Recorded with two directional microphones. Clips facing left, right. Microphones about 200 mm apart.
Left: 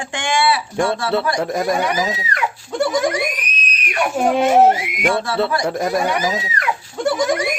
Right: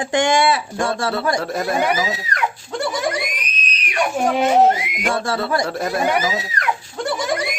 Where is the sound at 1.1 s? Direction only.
15° left (ahead or behind).